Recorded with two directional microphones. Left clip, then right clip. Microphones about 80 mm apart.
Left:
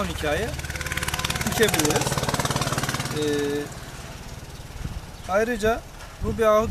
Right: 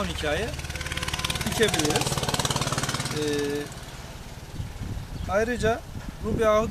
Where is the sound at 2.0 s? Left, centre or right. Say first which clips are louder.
Left 2 dB; centre.